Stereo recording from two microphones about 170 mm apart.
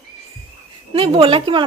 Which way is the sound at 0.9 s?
35° right (ahead or behind).